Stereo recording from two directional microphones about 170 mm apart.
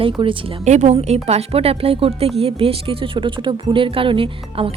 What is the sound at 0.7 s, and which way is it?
Speech, 40° right (ahead or behind).